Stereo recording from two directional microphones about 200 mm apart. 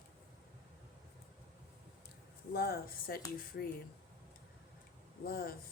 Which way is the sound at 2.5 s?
50° left (ahead or behind).